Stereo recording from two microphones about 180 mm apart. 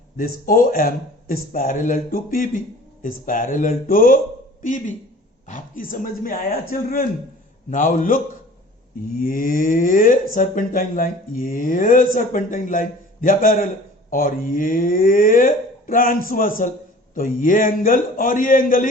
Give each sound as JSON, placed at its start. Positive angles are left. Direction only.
{"t": 0.2, "sound": "speech", "side_deg": 55}